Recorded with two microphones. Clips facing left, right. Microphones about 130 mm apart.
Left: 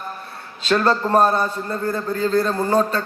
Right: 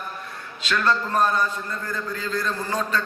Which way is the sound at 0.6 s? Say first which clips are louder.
Left 5 dB; 35° left (ahead or behind).